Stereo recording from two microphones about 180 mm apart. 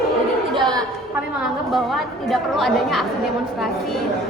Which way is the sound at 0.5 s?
25° right (ahead or behind).